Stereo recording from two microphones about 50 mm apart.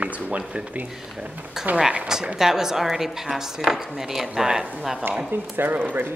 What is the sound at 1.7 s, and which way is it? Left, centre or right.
Speech, centre.